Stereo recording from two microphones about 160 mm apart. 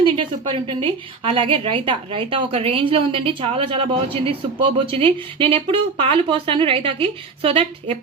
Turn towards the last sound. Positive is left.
turn(degrees=-35)  # may be behind; listen again after turning